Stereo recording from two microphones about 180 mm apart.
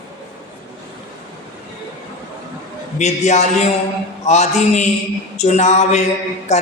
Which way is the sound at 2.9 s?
40° left (ahead or behind).